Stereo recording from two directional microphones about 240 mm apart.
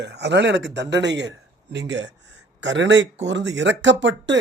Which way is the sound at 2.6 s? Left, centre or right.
Right.